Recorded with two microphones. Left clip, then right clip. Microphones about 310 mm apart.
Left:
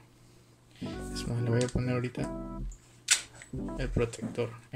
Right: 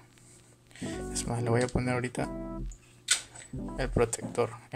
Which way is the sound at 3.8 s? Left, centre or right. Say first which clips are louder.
Right 5 dB; centre.